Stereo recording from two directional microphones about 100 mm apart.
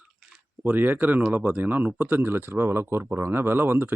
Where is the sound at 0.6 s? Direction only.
20° right (ahead or behind).